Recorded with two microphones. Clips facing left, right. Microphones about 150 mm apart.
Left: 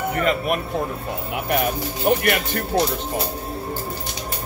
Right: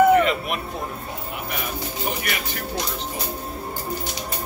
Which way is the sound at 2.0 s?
60° left (ahead or behind).